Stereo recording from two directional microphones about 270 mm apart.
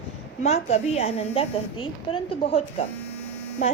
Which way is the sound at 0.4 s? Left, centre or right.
Left.